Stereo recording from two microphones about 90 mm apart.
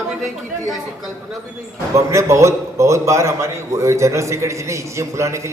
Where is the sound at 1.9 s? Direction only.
35° right (ahead or behind).